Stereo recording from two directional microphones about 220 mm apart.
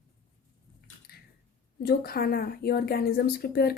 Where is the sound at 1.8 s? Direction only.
45° left (ahead or behind).